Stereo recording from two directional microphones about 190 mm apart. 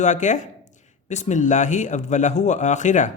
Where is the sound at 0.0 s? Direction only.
40° left (ahead or behind).